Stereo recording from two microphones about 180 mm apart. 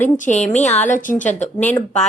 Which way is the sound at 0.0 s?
40° left (ahead or behind).